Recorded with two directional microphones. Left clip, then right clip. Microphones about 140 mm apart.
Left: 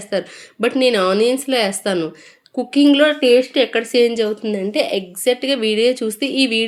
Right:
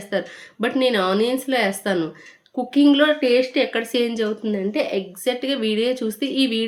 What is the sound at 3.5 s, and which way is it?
Speech, 15° left (ahead or behind).